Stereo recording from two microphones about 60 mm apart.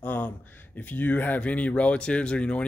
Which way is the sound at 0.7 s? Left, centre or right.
Left.